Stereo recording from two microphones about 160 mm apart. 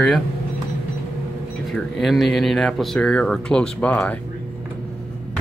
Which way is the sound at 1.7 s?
Centre (ahead or behind).